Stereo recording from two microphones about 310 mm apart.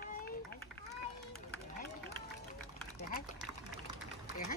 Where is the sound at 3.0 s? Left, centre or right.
Left.